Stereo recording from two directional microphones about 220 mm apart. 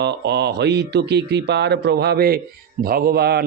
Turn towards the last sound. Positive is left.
turn(degrees=-45)  # may be behind; listen again after turning